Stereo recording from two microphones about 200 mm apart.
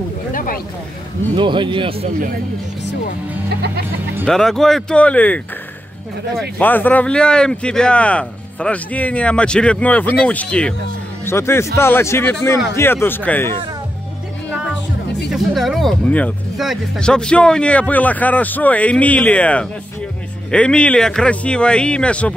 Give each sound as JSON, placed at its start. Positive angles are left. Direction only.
{"t": 0.3, "sound": "a sound", "side_deg": 40}
{"t": 1.3, "sound": "speech", "side_deg": -25}
{"t": 2.0, "sound": "speech", "side_deg": -45}
{"t": 3.4, "sound": "music", "side_deg": -55}
{"t": 4.3, "sound": "speech", "side_deg": 0}
{"t": 6.6, "sound": "speech", "side_deg": 10}
{"t": 15.3, "sound": "speech", "side_deg": 0}